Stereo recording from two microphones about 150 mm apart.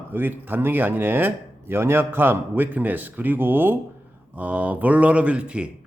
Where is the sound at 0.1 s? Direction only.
15° right (ahead or behind).